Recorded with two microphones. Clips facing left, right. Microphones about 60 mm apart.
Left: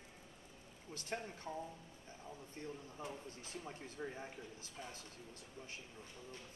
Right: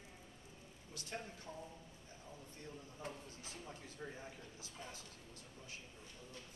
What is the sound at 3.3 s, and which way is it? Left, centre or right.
Speech, left.